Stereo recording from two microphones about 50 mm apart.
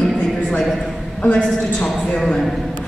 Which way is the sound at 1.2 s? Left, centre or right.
Left.